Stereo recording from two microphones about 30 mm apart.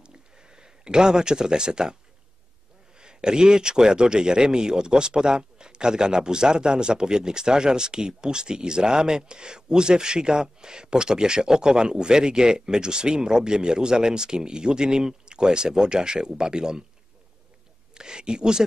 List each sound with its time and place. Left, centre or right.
0.0 s a sound: right
3.0 s speech: right
17.9 s speech: right